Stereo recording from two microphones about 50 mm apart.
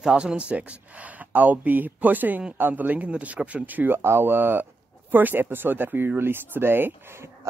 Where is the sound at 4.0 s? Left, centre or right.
Right.